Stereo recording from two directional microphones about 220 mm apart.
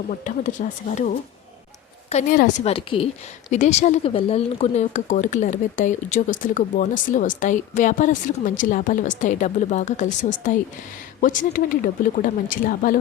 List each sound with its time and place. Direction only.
0.3 s a woman's voice: 35° left (ahead or behind)